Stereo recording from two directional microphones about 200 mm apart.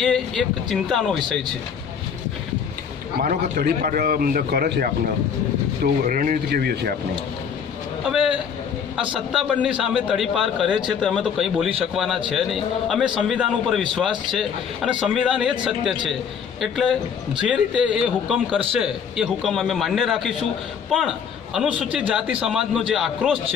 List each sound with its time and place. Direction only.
0.0 s speech: centre (ahead or behind)
3.2 s a man's voice: 50° right (ahead or behind)
6.0 s a man's voice: 45° right (ahead or behind)
8.0 s a man's voice: 5° right (ahead or behind)
15.0 s a man's voice: 5° right (ahead or behind)
21.5 s a man's voice: 5° right (ahead or behind)